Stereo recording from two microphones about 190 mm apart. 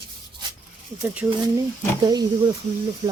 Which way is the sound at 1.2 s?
10° right (ahead or behind).